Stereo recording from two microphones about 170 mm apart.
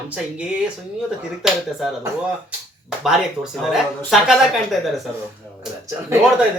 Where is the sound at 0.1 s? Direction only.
5° right (ahead or behind).